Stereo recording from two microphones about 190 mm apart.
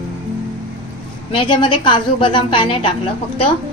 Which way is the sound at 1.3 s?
25° left (ahead or behind).